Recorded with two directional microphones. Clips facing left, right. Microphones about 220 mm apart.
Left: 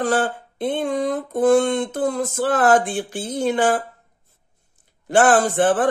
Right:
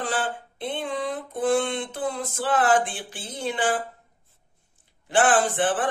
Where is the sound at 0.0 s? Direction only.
45° left (ahead or behind).